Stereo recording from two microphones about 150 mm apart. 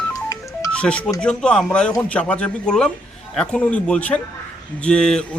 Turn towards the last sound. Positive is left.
turn(degrees=5)  # may be behind; listen again after turning